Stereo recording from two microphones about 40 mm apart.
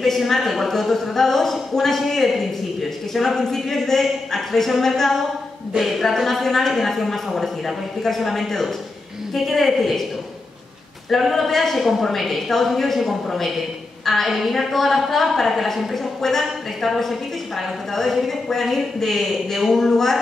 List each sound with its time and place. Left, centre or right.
0.3 s a woman's voice: centre
11.1 s a woman's voice: centre
11.8 s a woman's voice: centre